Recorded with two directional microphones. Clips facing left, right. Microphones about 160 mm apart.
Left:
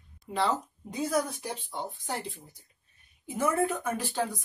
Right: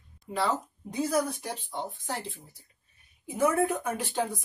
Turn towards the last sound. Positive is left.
turn(degrees=-15)  # may be behind; listen again after turning